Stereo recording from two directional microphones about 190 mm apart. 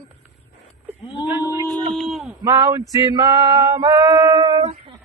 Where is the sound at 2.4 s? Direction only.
20° right (ahead or behind).